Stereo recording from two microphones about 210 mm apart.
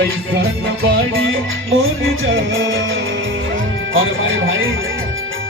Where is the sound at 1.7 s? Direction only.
70° right (ahead or behind).